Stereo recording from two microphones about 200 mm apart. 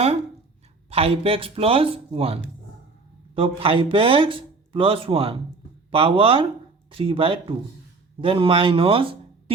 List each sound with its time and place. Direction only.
0.9 s speech: 30° right (ahead or behind)